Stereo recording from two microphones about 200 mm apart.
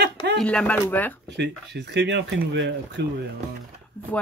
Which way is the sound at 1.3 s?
60° right (ahead or behind).